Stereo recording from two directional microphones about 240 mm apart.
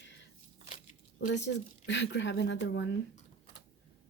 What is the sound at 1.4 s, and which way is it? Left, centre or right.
A woman's voice, left.